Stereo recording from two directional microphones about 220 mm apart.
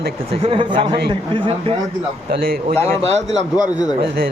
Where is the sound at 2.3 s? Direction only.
45° right (ahead or behind).